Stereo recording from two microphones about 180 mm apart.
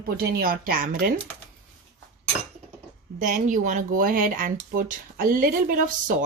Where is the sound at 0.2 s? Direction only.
55° right (ahead or behind).